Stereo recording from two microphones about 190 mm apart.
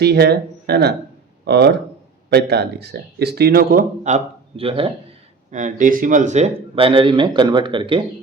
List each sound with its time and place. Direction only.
0.0 s a man's voice: 60° right (ahead or behind); by 4.9 s 30° right (ahead or behind)
5.5 s speech: 40° right (ahead or behind)